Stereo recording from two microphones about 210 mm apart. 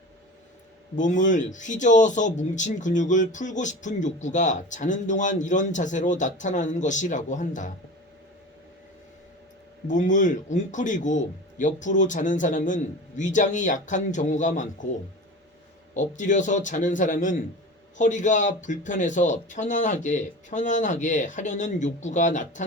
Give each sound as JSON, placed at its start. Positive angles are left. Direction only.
{"t": 0.9, "sound": "speech", "side_deg": 35}
{"t": 9.8, "sound": "speech", "side_deg": 35}
{"t": 16.0, "sound": "speech", "side_deg": 35}